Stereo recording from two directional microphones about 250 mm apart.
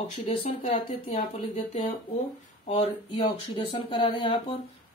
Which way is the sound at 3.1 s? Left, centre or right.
Centre.